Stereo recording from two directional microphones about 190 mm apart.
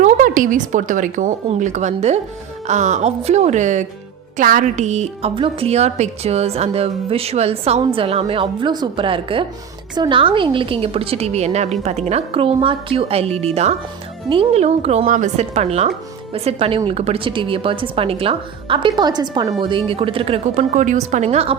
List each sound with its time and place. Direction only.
0.0 s a woman's voice: 45° right (ahead or behind)